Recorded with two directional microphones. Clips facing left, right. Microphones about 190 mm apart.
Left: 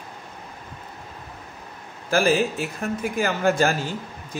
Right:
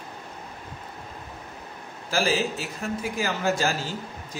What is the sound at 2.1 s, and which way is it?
Speech, 55° left (ahead or behind).